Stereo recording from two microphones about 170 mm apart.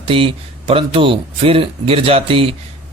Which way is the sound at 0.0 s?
30° right (ahead or behind).